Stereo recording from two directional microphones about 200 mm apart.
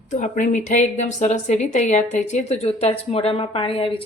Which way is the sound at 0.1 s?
35° left (ahead or behind).